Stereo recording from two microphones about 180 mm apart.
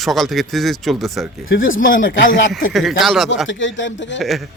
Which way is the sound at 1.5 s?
90° left.